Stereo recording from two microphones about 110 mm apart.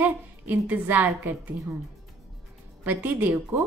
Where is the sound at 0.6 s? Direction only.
15° right (ahead or behind).